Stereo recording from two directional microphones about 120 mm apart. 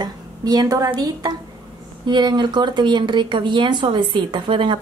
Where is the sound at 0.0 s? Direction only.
35° right (ahead or behind).